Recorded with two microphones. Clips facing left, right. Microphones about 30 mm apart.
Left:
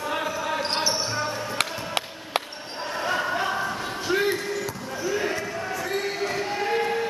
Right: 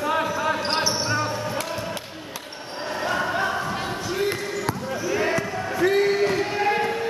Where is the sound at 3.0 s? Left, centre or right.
Centre.